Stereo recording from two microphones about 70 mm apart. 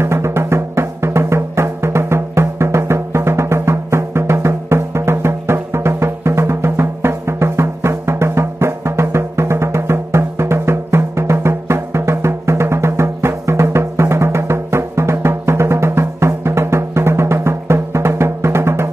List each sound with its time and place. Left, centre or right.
0.0 s music: right